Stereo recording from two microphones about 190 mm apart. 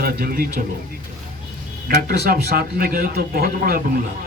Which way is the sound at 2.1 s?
50° right (ahead or behind).